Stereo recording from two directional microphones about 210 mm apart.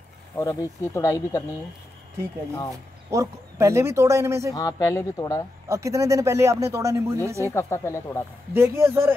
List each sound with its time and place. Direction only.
0.4 s speech: 15° left (ahead or behind)
3.1 s speech: 15° right (ahead or behind)
4.6 s speech: 15° left (ahead or behind)
5.7 s speech: 15° right (ahead or behind)
7.4 s speech: 10° left (ahead or behind)
8.5 s speech: 10° right (ahead or behind)